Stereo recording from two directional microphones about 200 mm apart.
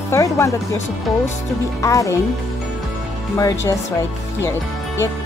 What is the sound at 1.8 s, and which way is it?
Speech, 15° left (ahead or behind).